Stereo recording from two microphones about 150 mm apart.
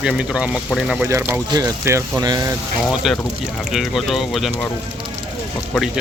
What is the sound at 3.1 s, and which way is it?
Speech, centre (ahead or behind).